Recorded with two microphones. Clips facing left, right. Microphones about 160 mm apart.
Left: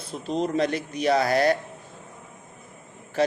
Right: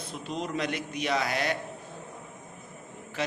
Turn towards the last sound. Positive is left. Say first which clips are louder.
# left 9 dB
turn(degrees=35)  # may be behind; listen again after turning